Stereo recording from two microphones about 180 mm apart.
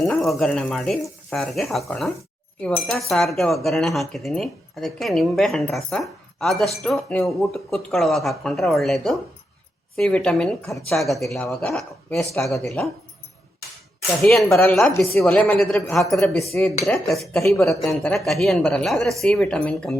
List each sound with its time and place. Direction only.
0.0 s speech: centre (ahead or behind)
14.3 s speech: centre (ahead or behind)
16.8 s speech: centre (ahead or behind)